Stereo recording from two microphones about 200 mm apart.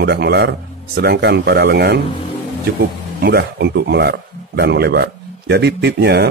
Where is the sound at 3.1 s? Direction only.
55° right (ahead or behind).